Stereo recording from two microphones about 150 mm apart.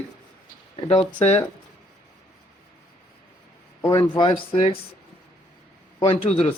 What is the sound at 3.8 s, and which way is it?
Speech, 30° left (ahead or behind).